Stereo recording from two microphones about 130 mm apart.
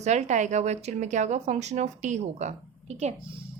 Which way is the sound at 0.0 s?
65° right (ahead or behind).